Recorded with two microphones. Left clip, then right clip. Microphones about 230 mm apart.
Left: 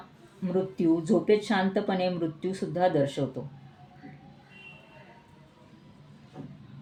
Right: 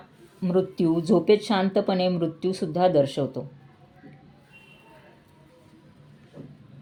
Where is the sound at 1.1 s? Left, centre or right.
Right.